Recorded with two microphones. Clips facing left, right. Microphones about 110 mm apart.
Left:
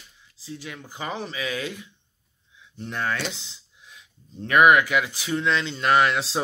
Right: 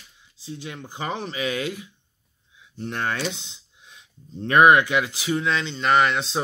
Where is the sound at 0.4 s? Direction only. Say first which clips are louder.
Right 2 dB; 20° right (ahead or behind).